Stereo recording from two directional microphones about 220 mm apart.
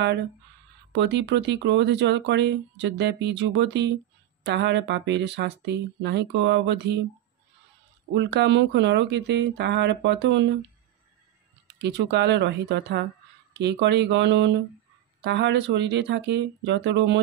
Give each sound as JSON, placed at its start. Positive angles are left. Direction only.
{"t": 0.9, "sound": "speech", "side_deg": -50}
{"t": 8.1, "sound": "speech", "side_deg": -50}
{"t": 11.6, "sound": "speech", "side_deg": -50}